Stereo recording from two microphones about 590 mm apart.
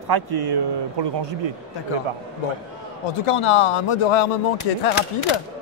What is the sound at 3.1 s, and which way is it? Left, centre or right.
Speech, left.